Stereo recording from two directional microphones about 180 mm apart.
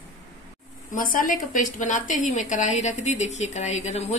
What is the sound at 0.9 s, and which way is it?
A woman's voice, 50° left (ahead or behind).